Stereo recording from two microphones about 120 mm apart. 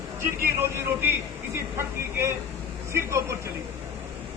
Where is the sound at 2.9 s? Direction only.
25° right (ahead or behind).